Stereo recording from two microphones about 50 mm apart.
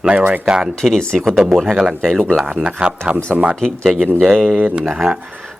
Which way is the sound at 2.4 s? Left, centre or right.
Right.